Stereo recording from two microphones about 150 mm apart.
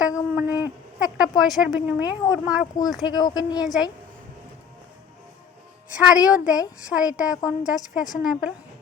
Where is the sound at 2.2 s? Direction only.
25° left (ahead or behind).